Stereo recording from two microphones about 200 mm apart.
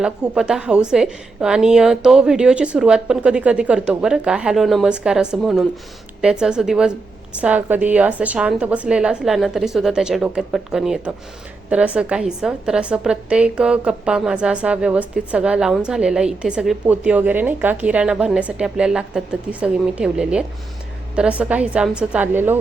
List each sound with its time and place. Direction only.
0.0 s a woman's voice: 5° right (ahead or behind)